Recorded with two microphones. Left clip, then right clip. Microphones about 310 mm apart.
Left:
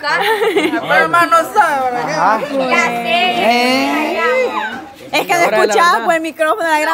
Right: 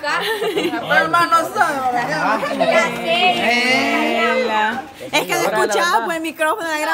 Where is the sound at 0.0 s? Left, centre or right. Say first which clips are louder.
Left 6 dB; centre.